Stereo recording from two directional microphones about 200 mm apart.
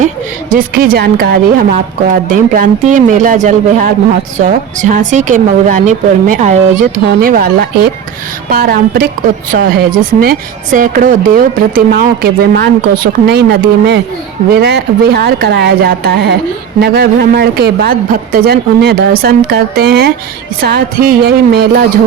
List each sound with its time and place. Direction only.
0.5 s speech: 45° right (ahead or behind)
1.7 s a woman's voice: 40° right (ahead or behind)